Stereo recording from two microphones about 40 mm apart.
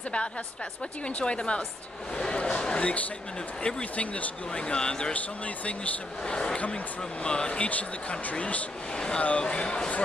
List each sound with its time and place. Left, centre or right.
1.0 s speech: left
4.6 s speech: left
6.2 s speech: left
8.9 s speech: left